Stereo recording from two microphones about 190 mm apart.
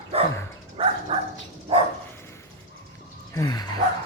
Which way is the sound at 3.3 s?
20° left (ahead or behind).